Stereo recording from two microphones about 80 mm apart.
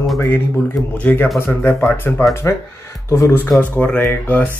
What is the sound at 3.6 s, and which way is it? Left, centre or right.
Speech, centre.